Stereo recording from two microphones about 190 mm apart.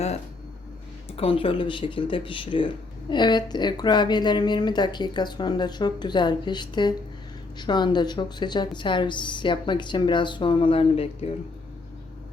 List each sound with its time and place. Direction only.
1.1 s a woman's voice: 30° left (ahead or behind)